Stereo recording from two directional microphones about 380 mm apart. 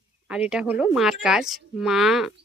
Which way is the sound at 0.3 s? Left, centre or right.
Centre.